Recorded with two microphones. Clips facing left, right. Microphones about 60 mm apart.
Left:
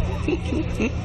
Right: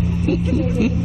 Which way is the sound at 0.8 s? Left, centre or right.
Centre.